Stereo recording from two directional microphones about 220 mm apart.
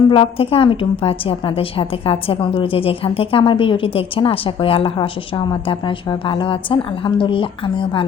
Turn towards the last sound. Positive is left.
turn(degrees=25)  # may be behind; listen again after turning